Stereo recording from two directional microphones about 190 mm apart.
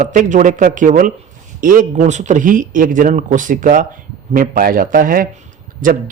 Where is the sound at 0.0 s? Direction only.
40° right (ahead or behind).